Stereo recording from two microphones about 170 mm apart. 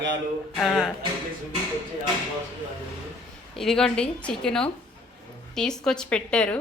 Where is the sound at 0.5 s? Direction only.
Centre (ahead or behind).